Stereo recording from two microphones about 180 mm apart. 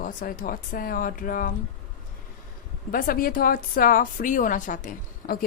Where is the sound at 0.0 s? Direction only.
50° left (ahead or behind).